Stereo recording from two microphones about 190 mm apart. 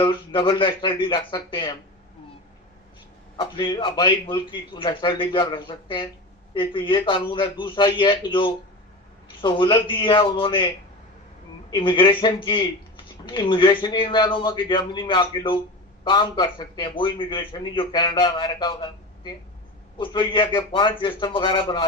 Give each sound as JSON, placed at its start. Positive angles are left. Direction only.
{"t": 0.0, "sound": "speech", "side_deg": 25}
{"t": 3.3, "sound": "speech", "side_deg": 25}
{"t": 11.7, "sound": "speech", "side_deg": 25}